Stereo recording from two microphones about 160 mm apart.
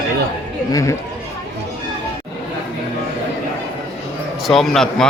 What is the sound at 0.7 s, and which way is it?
Speech, 20° left (ahead or behind).